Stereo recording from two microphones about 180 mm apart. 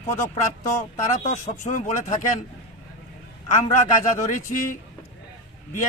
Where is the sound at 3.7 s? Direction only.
45° left (ahead or behind).